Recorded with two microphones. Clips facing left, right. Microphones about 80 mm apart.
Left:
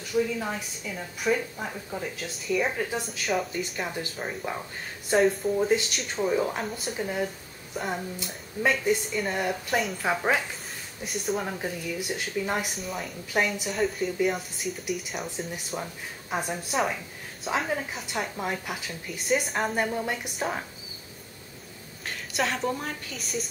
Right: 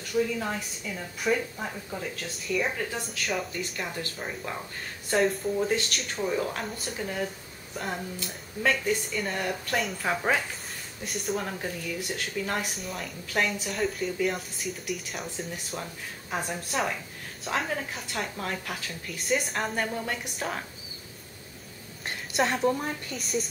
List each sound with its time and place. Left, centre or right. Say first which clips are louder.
0.1 s a woman's voice: left 1 dB; centre
2.7 s a woman's voice: left 3 dB; centre
3.0 s a woman's voice: left 3 dB; centre
3.8 s a woman's voice: left 2 dB; centre
8.9 s a woman's voice: left 3 dB; centre
9.7 s a woman's voice: left 1 dB; centre
12.7 s a woman's voice: left 2 dB; centre
13.3 s a woman's voice: left 1 dB; centre
19.1 s a woman's voice: left 2 dB; centre
22.3 s a woman's voice: right 3 dB; centre